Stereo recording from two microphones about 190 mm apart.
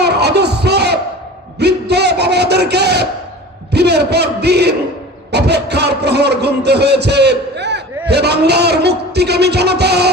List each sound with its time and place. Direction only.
0.0 s music: 60° right (ahead or behind)
1.5 s a sound: 60° right (ahead or behind)
3.7 s a man's voice: 60° right (ahead or behind)